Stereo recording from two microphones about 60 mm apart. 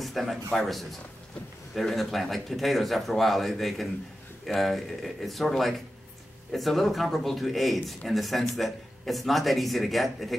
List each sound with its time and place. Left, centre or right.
0.0 s speech: centre
6.5 s speech: centre